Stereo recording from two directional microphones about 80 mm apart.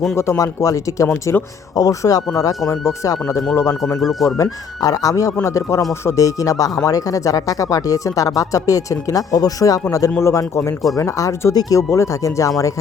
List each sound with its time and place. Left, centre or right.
0.2 s speech: left
1.0 s speech: left
1.7 s speech: left
4.0 s speech: centre
4.8 s speech: left